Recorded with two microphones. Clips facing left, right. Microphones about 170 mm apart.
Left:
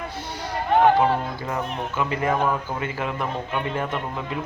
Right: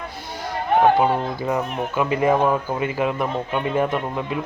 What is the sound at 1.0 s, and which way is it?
Speech, 25° right (ahead or behind).